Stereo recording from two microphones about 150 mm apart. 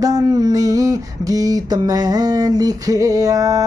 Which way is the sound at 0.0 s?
25° right (ahead or behind).